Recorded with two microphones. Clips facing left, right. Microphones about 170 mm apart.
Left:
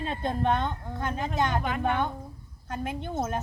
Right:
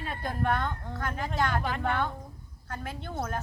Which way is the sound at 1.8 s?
15° left (ahead or behind).